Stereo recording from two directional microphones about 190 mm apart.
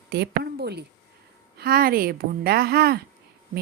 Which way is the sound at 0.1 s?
55° right (ahead or behind).